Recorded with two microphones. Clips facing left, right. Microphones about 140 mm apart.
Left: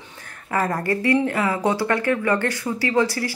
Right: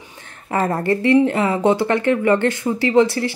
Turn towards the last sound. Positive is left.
turn(degrees=-25)  # may be behind; listen again after turning